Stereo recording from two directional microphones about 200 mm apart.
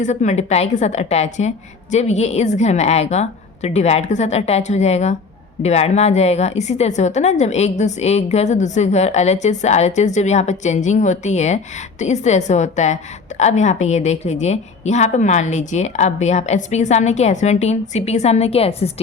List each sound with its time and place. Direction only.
0.0 s a woman's voice: 35° left (ahead or behind)